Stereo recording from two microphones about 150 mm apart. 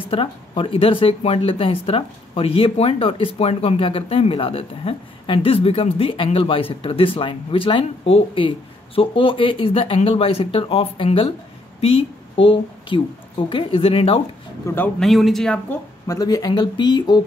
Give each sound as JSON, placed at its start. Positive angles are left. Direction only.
{"t": 0.1, "sound": "a woman's voice", "side_deg": 35}
{"t": 14.7, "sound": "speech", "side_deg": 20}
{"t": 15.0, "sound": "speech", "side_deg": 0}
{"t": 16.1, "sound": "speech", "side_deg": 25}